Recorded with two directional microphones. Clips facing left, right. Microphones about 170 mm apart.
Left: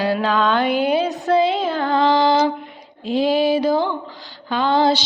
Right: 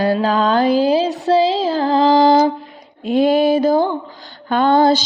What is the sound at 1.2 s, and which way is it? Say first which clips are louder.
Child singing: right 2 dB; 30° right (ahead or behind).